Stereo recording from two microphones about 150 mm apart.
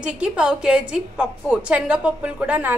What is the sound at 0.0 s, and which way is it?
A woman's voice, 5° right (ahead or behind).